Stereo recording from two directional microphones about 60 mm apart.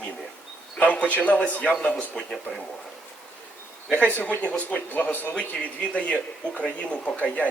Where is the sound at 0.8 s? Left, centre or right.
Left.